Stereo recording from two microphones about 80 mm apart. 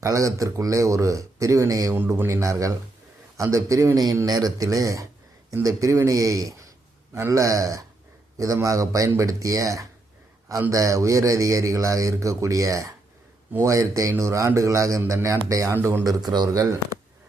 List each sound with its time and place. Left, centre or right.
0.0 s a man's voice: right
4.3 s a man's voice: right
15.7 s a man's voice: right
16.0 s a man's voice: right